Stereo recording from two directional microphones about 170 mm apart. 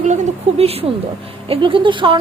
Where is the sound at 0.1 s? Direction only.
45° right (ahead or behind).